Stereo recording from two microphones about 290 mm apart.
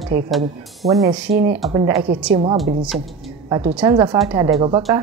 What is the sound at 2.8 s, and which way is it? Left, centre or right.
Speech, centre.